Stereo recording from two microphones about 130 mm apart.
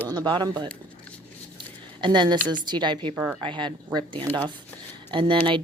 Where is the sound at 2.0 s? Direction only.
35° right (ahead or behind).